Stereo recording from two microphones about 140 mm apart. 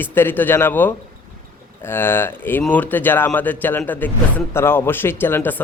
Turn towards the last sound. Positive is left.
turn(degrees=15)  # may be behind; listen again after turning